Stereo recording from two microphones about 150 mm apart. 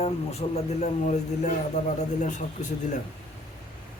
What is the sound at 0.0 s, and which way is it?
Speech, 45° left (ahead or behind).